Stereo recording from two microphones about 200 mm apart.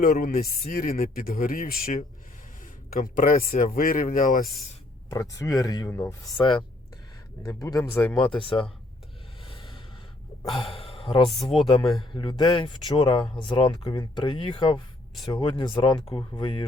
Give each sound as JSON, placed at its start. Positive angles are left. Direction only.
{"t": 0.0, "sound": "speech", "side_deg": 45}
{"t": 5.0, "sound": "speech", "side_deg": 15}
{"t": 8.3, "sound": "speech", "side_deg": 25}
{"t": 9.5, "sound": "a sound", "side_deg": 25}
{"t": 10.5, "sound": "speech", "side_deg": 30}
{"t": 11.5, "sound": "speech", "side_deg": 0}
{"t": 12.1, "sound": "speech", "side_deg": 25}